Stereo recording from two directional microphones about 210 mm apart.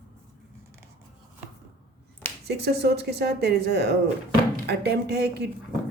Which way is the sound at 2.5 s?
50° right (ahead or behind).